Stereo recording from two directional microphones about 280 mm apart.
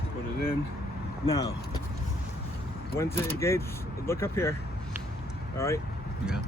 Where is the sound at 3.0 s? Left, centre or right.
Centre.